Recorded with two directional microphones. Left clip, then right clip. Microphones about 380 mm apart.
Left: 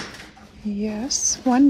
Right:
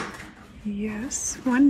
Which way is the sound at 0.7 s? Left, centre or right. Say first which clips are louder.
Left 6 dB; centre.